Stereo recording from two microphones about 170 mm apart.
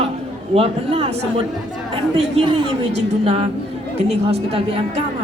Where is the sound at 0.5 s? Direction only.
35° right (ahead or behind).